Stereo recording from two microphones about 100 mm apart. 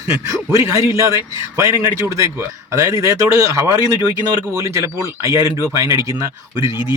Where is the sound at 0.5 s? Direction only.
35° right (ahead or behind).